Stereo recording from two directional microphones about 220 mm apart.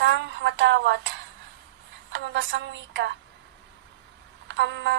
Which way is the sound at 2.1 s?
55° right (ahead or behind).